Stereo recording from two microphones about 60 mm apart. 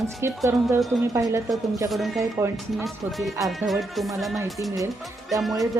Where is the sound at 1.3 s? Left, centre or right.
Right.